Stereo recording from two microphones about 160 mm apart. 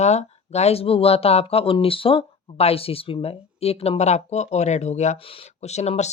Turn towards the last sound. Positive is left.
turn(degrees=45)  # may be behind; listen again after turning